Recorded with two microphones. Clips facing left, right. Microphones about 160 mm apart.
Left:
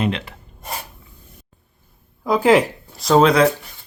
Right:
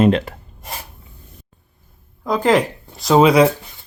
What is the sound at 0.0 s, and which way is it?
Speech, 45° right (ahead or behind).